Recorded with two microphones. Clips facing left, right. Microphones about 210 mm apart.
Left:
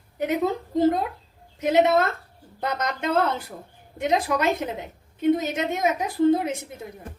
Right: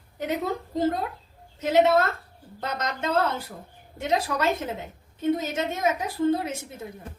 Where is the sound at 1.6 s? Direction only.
15° left (ahead or behind).